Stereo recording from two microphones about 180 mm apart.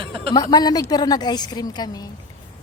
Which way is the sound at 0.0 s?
30° right (ahead or behind).